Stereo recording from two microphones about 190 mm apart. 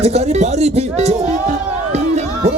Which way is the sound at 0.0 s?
35° right (ahead or behind).